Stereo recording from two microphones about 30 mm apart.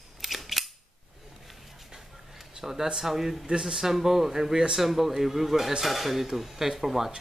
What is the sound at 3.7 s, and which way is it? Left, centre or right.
Speech, centre.